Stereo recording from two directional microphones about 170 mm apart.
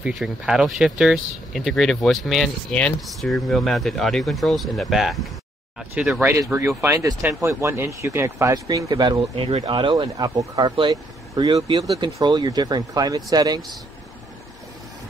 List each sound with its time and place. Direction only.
0.0 s speech: centre (ahead or behind); by 13.6 s 20° right (ahead or behind)